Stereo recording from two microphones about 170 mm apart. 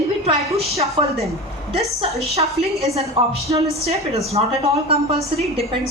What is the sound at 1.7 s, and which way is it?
A woman's voice, 40° right (ahead or behind).